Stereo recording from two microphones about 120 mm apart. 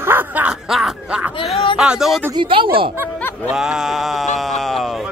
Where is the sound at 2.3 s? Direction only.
45° right (ahead or behind).